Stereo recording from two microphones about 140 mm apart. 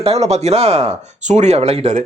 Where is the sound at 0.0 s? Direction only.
50° right (ahead or behind).